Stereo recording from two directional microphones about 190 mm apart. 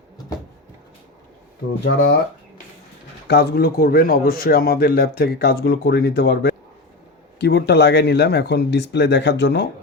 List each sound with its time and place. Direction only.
1.8 s speech: 55° left (ahead or behind)
3.2 s speech: 60° left (ahead or behind)